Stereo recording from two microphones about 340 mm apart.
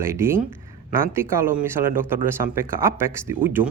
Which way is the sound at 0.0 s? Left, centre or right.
Centre.